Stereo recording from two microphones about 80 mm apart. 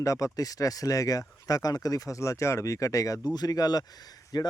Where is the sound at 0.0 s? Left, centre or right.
Left.